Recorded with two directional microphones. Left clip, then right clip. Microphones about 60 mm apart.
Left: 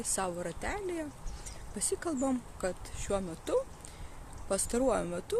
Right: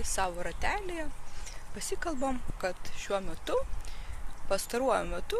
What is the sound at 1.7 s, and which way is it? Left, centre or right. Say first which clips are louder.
Speech: left 1 dB; left.